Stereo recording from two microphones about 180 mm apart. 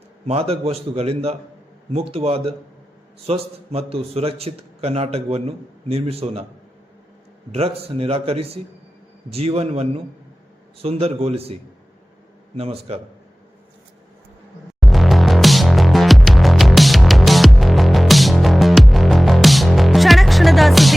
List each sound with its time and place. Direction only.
0.3 s a man's voice: 35° right (ahead or behind)
7.5 s a man's voice: 35° right (ahead or behind)
14.8 s music: centre (ahead or behind)